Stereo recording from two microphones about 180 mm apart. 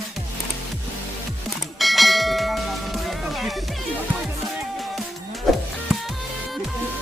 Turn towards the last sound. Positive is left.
turn(degrees=-5)  # may be behind; listen again after turning